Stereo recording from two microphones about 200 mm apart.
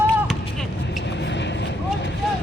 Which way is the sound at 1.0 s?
60° left (ahead or behind).